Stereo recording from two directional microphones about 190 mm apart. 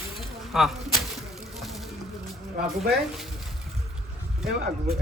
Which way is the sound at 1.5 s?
Centre (ahead or behind).